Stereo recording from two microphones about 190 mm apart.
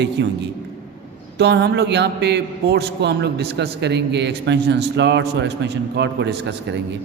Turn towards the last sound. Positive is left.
turn(degrees=-65)  # may be behind; listen again after turning